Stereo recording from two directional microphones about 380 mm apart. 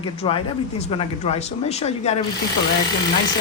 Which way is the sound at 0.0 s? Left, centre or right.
Centre.